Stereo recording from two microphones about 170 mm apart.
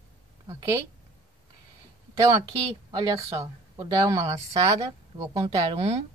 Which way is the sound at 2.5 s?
20° right (ahead or behind).